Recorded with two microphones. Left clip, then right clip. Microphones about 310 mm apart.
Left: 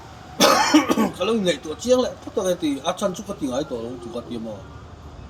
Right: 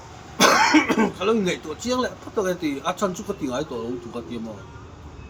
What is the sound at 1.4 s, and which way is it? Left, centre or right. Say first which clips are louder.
Speech: left 3 dB; centre.